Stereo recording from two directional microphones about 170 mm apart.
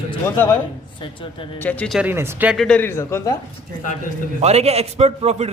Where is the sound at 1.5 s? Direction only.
10° left (ahead or behind).